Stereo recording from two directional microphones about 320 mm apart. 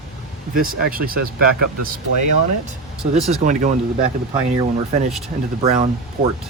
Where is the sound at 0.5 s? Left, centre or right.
Right.